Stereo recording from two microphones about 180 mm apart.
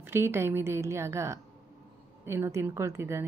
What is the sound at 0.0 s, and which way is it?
A woman's voice, 15° right (ahead or behind).